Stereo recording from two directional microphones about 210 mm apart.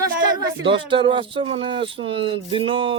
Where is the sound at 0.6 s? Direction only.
25° right (ahead or behind).